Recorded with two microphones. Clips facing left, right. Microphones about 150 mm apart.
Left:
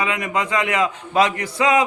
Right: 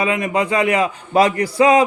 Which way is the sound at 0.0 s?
30° right (ahead or behind).